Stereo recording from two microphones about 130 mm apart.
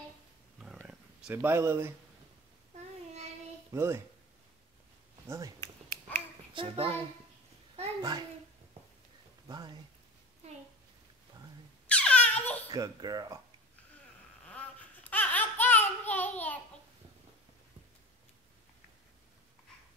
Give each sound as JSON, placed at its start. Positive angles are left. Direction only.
{"t": 0.8, "sound": "purr", "side_deg": -10}
{"t": 3.7, "sound": "speech", "side_deg": -20}
{"t": 5.6, "sound": "finger snapping", "side_deg": 15}
{"t": 6.5, "sound": "a child's voice", "side_deg": -45}
{"t": 8.0, "sound": "a child's voice", "side_deg": -30}
{"t": 9.5, "sound": "a child's voice", "side_deg": -35}
{"t": 11.9, "sound": "a sound", "side_deg": 10}
{"t": 12.7, "sound": "speech", "side_deg": -30}
{"t": 14.5, "sound": "a sound", "side_deg": 10}